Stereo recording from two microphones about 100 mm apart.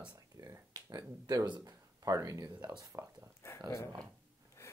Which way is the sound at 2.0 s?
35° right (ahead or behind).